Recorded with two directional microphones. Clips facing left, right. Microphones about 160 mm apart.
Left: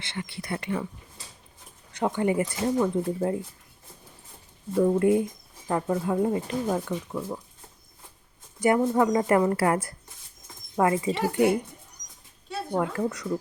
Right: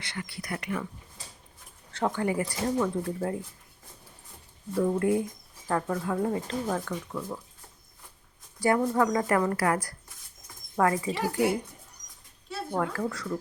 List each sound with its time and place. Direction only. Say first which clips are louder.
0.0 s a woman's voice: left 2 dB; 25° left (ahead or behind)
1.9 s a woman's voice: left 3 dB; 15° left (ahead or behind)
4.7 s a woman's voice: left 4 dB; 20° left (ahead or behind)
8.5 s a woman's voice: left 3 dB; 20° left (ahead or behind)
12.7 s a woman's voice: left 3 dB; 20° left (ahead or behind)